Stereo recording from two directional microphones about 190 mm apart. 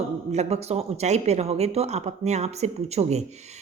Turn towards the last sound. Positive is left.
turn(degrees=-35)  # may be behind; listen again after turning